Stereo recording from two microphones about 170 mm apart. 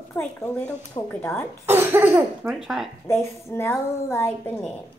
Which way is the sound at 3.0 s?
15° left (ahead or behind).